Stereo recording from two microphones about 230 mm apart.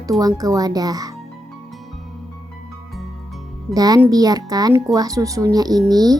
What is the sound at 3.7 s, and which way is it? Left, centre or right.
Speech, centre.